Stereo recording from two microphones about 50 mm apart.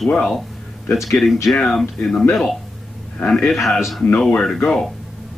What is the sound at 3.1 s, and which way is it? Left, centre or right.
A man's voice, left.